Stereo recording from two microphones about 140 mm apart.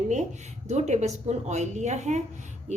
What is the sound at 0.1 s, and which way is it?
A woman's voice, 55° right (ahead or behind).